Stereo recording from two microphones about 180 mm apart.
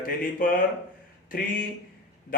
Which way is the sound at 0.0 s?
50° left (ahead or behind).